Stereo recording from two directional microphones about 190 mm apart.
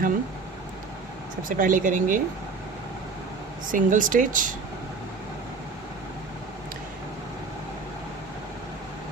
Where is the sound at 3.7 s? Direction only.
45° right (ahead or behind).